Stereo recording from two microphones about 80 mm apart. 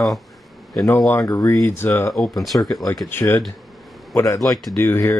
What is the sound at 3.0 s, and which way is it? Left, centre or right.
Speech, left.